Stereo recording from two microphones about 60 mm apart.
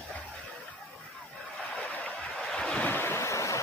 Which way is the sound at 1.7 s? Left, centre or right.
Left.